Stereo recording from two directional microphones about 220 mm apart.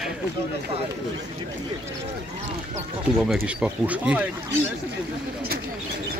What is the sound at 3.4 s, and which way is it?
Speech, 5° right (ahead or behind).